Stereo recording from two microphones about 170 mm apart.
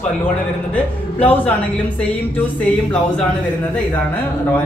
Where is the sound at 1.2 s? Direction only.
10° left (ahead or behind).